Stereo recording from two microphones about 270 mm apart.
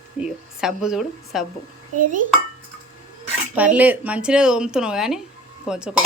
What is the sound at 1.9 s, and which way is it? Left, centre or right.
Speech, right.